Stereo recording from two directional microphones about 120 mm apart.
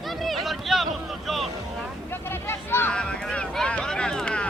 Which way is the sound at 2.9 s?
10° left (ahead or behind).